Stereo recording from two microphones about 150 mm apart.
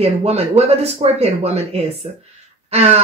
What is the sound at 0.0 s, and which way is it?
Speech, 45° right (ahead or behind).